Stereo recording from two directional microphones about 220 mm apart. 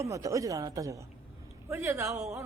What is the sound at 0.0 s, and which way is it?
A woman's voice, 15° right (ahead or behind).